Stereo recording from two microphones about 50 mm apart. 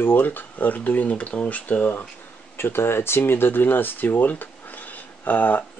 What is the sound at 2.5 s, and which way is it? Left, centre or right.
Speech, left.